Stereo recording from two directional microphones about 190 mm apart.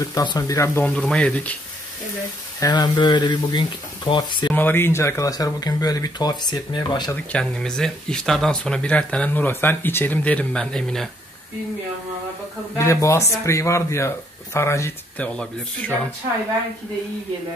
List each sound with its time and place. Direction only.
0.0 s speech: 20° left (ahead or behind)
2.6 s speech: 20° left (ahead or behind)
4.6 s speech: 10° left (ahead or behind)
7.2 s speech: 5° left (ahead or behind)
12.7 s speech: 15° left (ahead or behind)